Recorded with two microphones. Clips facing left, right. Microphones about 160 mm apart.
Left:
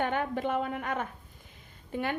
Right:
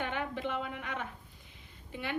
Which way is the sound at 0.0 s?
45° left (ahead or behind).